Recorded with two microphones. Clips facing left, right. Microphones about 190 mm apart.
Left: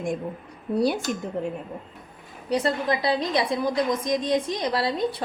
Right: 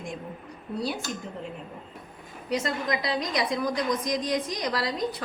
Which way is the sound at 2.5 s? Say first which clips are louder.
Left 4 dB; 35° left (ahead or behind).